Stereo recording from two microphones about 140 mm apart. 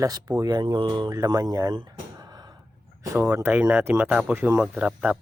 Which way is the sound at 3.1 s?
15° right (ahead or behind).